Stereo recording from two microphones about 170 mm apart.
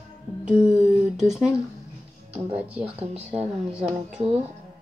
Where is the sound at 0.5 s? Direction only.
5° right (ahead or behind).